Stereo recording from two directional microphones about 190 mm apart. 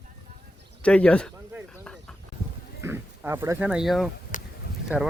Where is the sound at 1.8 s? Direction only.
5° left (ahead or behind).